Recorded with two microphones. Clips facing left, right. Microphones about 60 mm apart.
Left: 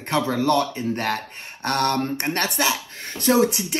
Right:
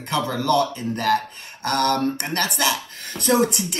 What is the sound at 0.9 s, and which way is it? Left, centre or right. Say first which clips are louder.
Speech: right 7 dB; left.